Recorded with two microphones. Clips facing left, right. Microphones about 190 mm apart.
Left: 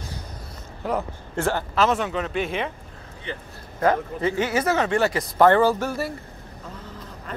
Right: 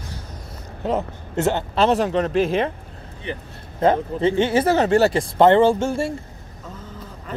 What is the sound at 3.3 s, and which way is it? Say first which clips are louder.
Speech: right 3 dB; 25° right (ahead or behind).